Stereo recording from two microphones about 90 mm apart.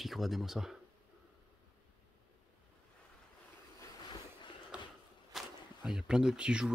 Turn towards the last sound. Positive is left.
turn(degrees=-10)  # may be behind; listen again after turning